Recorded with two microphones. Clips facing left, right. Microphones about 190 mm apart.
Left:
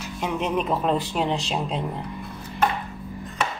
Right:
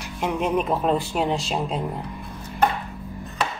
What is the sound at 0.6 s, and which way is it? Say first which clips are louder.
Speech: left 1 dB; 5° right (ahead or behind).